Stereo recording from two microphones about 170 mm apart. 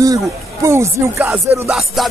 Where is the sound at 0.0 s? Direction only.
20° right (ahead or behind).